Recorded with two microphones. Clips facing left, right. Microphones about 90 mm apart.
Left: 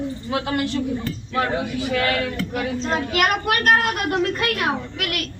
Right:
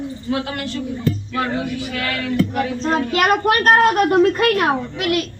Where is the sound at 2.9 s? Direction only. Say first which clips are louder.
Right 4 dB; 35° right (ahead or behind).